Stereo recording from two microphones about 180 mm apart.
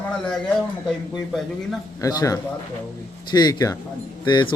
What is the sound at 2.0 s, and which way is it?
A man's voice, 20° left (ahead or behind).